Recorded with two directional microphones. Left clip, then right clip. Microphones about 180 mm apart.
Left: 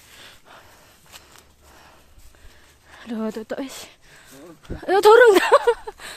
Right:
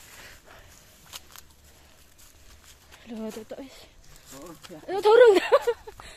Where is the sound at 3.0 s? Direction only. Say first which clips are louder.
Left 8 dB; 55° left (ahead or behind).